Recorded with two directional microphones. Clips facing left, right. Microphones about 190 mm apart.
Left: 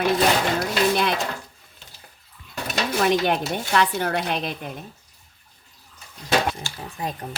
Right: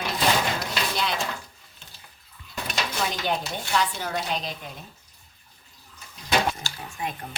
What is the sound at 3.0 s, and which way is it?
Speech, 65° left (ahead or behind).